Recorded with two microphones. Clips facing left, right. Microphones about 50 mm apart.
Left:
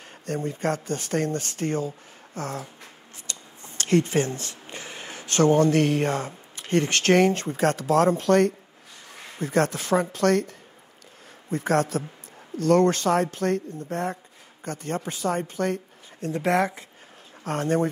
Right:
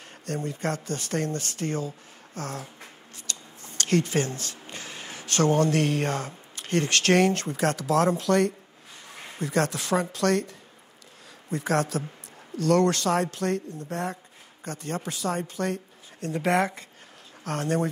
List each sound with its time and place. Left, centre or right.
0.3 s speech: left
3.3 s a sound: left
7.5 s speech: left
11.5 s speech: left
17.4 s speech: left